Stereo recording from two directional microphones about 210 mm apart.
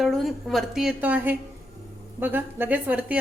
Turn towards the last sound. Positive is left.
turn(degrees=-5)  # may be behind; listen again after turning